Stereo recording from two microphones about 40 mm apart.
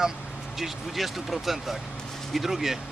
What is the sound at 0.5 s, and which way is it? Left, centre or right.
Speech, centre.